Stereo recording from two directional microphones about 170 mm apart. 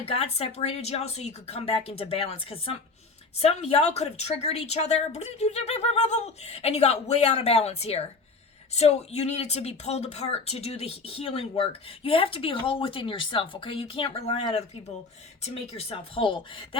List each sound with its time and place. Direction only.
0.0 s speech: 35° left (ahead or behind)